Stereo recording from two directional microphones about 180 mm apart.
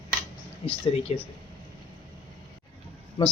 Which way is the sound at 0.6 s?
30° left (ahead or behind).